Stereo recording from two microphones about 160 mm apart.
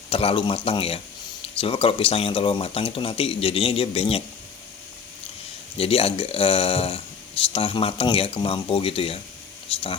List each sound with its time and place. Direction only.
0.1 s speech: 35° left (ahead or behind)
5.7 s speech: 35° left (ahead or behind)